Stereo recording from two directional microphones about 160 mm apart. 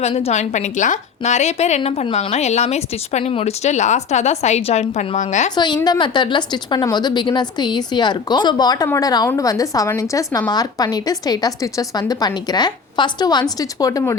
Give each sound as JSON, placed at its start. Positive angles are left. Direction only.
{"t": 0.0, "sound": "a woman's voice", "side_deg": 40}
{"t": 5.5, "sound": "a woman's voice", "side_deg": 25}